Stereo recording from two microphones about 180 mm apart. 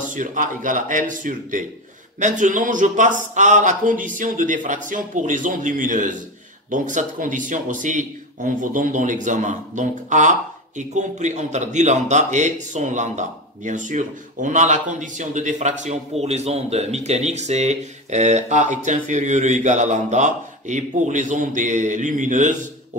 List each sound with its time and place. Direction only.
0.0 s speech: 45° right (ahead or behind)